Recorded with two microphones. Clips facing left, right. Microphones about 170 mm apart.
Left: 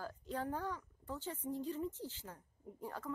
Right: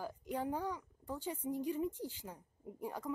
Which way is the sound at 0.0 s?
15° right (ahead or behind).